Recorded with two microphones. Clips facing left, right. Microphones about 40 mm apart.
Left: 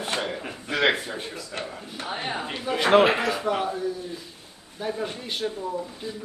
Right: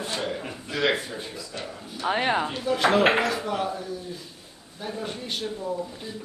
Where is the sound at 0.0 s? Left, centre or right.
Left.